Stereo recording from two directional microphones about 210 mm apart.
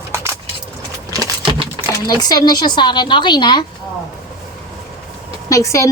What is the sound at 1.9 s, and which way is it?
Speech, 20° left (ahead or behind).